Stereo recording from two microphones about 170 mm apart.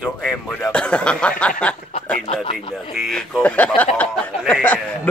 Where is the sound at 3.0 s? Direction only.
Centre (ahead or behind).